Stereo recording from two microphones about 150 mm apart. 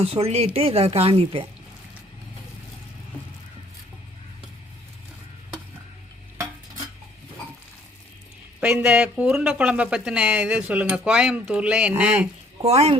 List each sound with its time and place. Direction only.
0.0 s speech: 40° right (ahead or behind)
8.6 s speech: 15° right (ahead or behind)
12.6 s speech: 45° right (ahead or behind)